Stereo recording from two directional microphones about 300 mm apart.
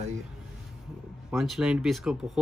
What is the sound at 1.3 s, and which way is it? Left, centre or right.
Speech, centre.